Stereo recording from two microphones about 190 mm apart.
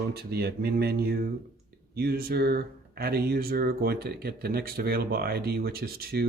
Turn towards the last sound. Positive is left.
turn(degrees=-55)  # may be behind; listen again after turning